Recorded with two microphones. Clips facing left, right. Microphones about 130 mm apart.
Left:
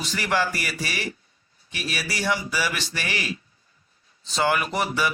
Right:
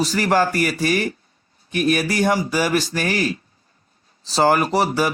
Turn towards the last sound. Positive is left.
turn(degrees=-40)  # may be behind; listen again after turning